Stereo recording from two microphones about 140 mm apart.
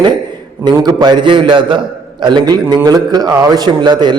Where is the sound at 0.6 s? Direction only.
30° right (ahead or behind).